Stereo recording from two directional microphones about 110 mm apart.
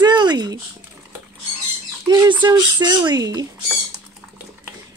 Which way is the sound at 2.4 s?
40° right (ahead or behind).